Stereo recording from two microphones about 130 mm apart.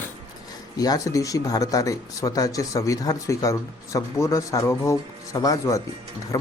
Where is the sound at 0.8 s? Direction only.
25° left (ahead or behind).